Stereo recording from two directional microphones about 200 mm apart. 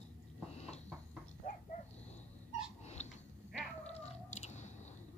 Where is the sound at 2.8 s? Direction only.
35° left (ahead or behind).